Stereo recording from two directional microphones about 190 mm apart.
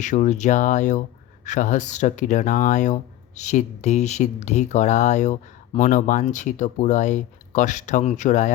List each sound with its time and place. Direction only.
0.0 s speech: 40° left (ahead or behind)